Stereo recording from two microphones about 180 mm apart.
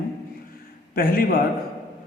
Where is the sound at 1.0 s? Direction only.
55° left (ahead or behind).